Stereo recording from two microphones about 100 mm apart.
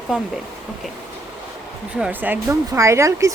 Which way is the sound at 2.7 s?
30° right (ahead or behind).